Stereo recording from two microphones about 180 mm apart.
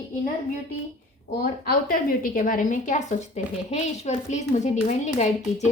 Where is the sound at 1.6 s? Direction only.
50° left (ahead or behind).